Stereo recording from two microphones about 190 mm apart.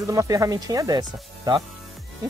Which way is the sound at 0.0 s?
15° right (ahead or behind).